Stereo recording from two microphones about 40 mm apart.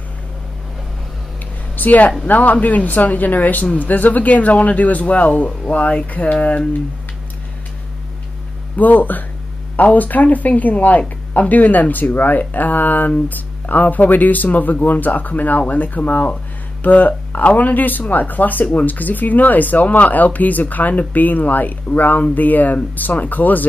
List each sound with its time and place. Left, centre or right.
1.8 s speech: left
8.7 s speech: left